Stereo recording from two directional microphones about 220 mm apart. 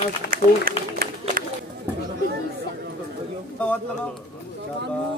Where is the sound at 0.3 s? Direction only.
40° right (ahead or behind).